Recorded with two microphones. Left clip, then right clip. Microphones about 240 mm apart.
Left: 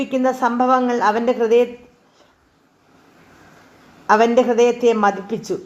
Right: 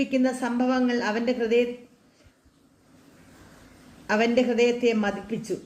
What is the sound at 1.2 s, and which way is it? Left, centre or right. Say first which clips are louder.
Speech: left 5 dB; centre.